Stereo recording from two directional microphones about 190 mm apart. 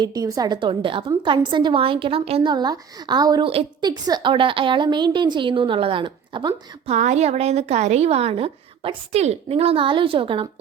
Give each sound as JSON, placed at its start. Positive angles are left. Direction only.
{"t": 0.0, "sound": "a woman's voice", "side_deg": -20}
{"t": 6.8, "sound": "speech", "side_deg": -35}